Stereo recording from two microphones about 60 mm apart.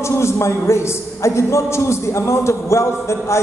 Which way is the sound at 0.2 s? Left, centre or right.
Left.